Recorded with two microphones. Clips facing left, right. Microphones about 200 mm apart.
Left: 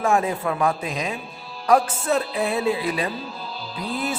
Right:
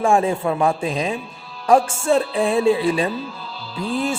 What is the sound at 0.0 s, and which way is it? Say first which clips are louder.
A woman's voice: right 4 dB; 30° right (ahead or behind).